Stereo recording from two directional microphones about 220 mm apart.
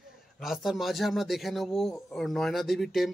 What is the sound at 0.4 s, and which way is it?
Speech, centre (ahead or behind).